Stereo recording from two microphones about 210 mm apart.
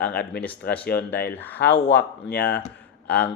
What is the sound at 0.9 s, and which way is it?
Speech, 10° left (ahead or behind).